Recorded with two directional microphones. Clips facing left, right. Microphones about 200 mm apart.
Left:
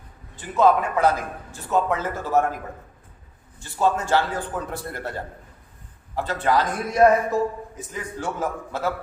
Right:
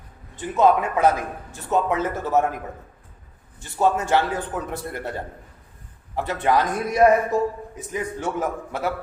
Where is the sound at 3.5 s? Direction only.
20° right (ahead or behind).